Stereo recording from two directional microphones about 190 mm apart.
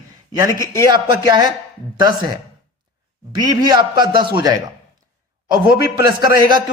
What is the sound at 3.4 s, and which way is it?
A man's voice, 20° right (ahead or behind).